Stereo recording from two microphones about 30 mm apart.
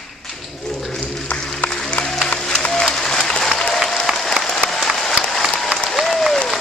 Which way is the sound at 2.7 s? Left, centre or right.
Centre.